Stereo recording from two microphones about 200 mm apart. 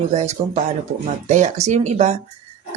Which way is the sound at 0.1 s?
35° right (ahead or behind).